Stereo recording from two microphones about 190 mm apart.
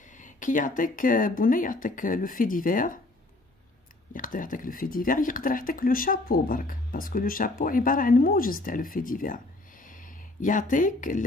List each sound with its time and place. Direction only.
0.0 s speech: 40° left (ahead or behind)
4.1 s speech: 45° left (ahead or behind)